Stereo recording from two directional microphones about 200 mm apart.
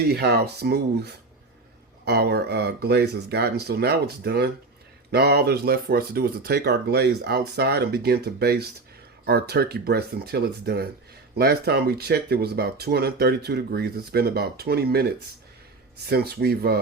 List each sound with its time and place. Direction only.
0.0 s speech: 55° right (ahead or behind)
16.0 s speech: 50° right (ahead or behind)